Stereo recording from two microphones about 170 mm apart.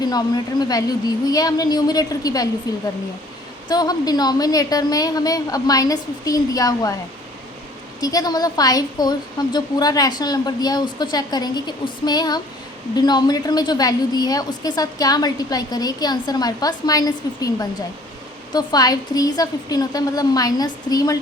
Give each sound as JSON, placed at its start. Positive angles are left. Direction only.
{"t": 0.0, "sound": "a woman's voice", "side_deg": 25}
{"t": 3.7, "sound": "a woman's voice", "side_deg": 25}
{"t": 8.0, "sound": "a woman's voice", "side_deg": 20}